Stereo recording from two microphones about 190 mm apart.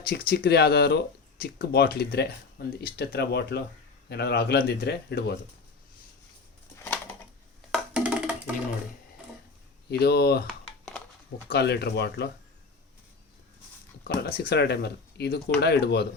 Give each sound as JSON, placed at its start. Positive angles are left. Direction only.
{"t": 0.0, "sound": "speech", "side_deg": 55}
{"t": 7.7, "sound": "wood block", "side_deg": -5}
{"t": 10.0, "sound": "speech", "side_deg": 55}
{"t": 11.4, "sound": "speech", "side_deg": 60}
{"t": 14.0, "sound": "speech", "side_deg": 50}